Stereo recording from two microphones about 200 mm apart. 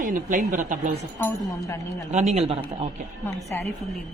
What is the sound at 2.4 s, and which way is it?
Speech, 30° right (ahead or behind).